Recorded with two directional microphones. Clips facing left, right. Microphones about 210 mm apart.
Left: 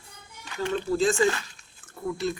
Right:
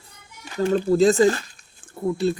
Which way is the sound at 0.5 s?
40° right (ahead or behind).